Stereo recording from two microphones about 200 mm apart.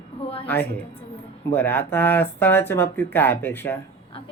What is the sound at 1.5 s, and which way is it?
Speech, 10° left (ahead or behind).